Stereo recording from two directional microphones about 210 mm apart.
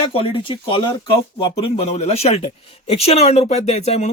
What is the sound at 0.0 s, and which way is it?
Speech, 25° left (ahead or behind).